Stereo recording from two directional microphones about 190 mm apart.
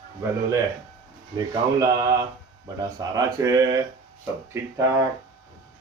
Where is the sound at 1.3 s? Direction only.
20° right (ahead or behind).